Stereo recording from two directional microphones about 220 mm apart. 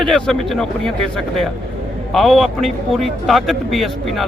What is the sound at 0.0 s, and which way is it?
Speech, centre (ahead or behind).